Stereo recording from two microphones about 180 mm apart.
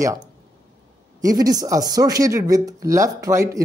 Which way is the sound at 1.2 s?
20° right (ahead or behind).